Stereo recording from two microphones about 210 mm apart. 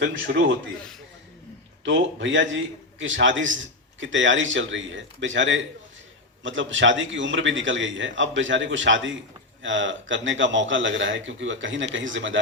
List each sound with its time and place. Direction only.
0.0 s a man's voice: 65° right (ahead or behind)
1.8 s a man's voice: 65° right (ahead or behind)